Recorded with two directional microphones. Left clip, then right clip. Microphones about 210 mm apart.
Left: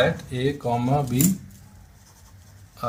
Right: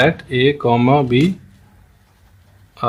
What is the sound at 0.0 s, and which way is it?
Speech, 30° right (ahead or behind).